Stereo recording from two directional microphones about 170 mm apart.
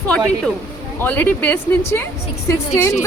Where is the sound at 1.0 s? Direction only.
10° left (ahead or behind).